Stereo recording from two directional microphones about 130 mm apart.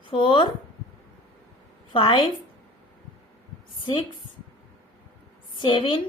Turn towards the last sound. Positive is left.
turn(degrees=40)  # may be behind; listen again after turning